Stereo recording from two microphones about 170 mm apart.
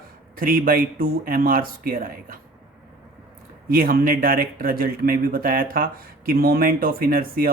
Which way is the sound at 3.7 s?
60° right (ahead or behind).